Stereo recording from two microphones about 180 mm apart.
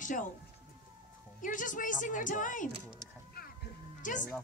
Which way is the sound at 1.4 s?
45° left (ahead or behind).